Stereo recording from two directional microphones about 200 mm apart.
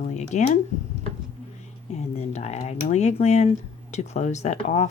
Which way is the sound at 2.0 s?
35° left (ahead or behind).